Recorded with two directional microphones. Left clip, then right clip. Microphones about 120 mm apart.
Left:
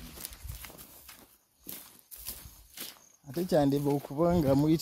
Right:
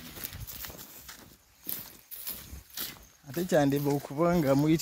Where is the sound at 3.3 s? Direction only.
20° left (ahead or behind).